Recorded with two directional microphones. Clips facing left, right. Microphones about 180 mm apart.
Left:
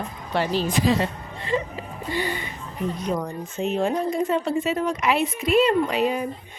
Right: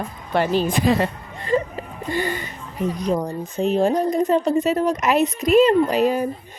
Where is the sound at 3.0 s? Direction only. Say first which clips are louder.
Right 4 dB; 30° right (ahead or behind).